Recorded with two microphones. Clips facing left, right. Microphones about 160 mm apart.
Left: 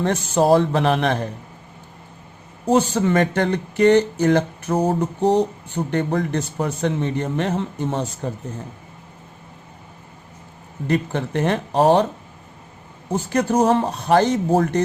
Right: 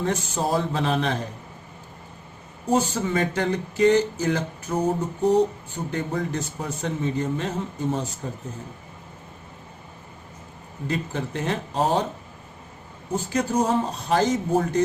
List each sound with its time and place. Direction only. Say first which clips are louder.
0.0 s speech: left 7 dB; 75° left (ahead or behind)
2.6 s speech: left 5 dB; 70° left (ahead or behind)
5.2 s speech: left 1 dB; 80° left
10.8 s speech: left 6 dB; 60° left (ahead or behind)
13.3 s speech: left 5 dB; 75° left (ahead or behind)